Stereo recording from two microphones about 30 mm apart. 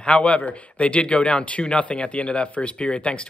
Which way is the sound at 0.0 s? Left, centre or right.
Left.